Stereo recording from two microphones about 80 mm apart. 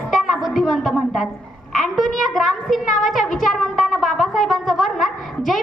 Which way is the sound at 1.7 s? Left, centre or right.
Centre.